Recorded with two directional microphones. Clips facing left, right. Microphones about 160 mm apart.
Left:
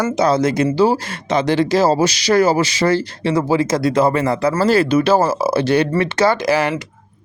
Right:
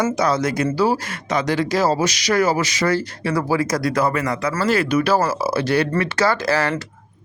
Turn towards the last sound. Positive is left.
turn(degrees=15)  # may be behind; listen again after turning